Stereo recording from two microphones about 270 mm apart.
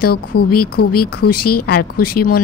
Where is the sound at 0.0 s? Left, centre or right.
Left.